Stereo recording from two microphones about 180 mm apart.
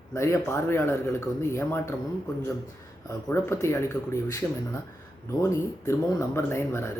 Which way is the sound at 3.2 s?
15° left (ahead or behind).